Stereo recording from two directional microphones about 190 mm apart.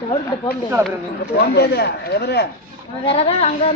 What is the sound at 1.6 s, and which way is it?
Speech, 60° left (ahead or behind).